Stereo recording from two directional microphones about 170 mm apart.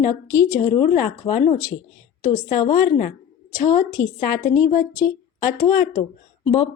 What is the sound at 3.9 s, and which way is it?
Speech, 20° left (ahead or behind).